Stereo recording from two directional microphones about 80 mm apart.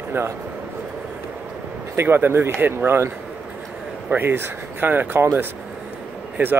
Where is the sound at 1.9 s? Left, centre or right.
Right.